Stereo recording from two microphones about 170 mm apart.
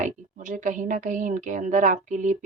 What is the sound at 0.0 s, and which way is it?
A woman's voice, 50° right (ahead or behind).